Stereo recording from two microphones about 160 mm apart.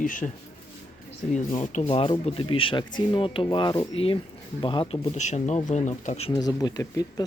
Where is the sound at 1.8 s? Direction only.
35° left (ahead or behind).